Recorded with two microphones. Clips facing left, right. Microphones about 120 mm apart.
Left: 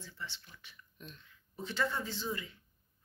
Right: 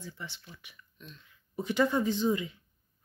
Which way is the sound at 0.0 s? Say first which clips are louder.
Right 3 dB; 15° right (ahead or behind).